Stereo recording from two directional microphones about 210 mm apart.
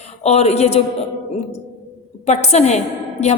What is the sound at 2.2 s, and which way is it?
A woman's voice, 30° left (ahead or behind).